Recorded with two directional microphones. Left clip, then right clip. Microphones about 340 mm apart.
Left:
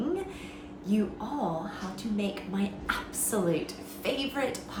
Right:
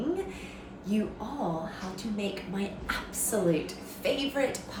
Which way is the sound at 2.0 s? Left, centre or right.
Centre.